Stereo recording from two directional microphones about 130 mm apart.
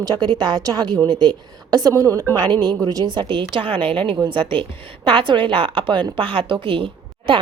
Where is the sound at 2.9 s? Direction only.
35° right (ahead or behind).